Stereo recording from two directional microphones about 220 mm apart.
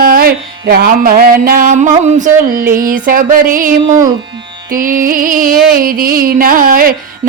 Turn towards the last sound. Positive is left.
turn(degrees=-40)  # may be behind; listen again after turning